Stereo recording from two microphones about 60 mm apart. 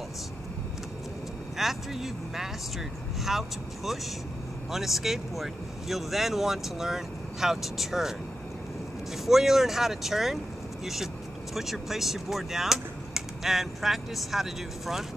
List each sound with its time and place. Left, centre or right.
1.6 s speech: centre
9.2 s speech: centre
11.5 s speech: centre